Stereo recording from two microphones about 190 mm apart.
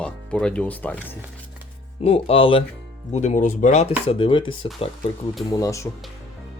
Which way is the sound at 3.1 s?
40° left (ahead or behind).